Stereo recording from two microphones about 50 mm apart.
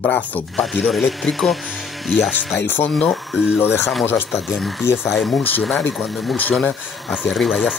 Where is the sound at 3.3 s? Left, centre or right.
Centre.